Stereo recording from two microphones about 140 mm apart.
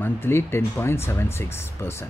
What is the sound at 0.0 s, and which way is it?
Speech, 15° left (ahead or behind).